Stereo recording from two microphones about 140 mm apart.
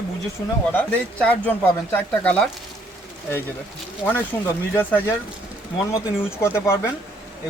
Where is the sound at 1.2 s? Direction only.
10° left (ahead or behind).